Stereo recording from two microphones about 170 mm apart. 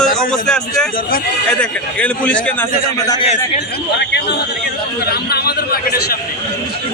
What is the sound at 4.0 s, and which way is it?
Speech, 80° left.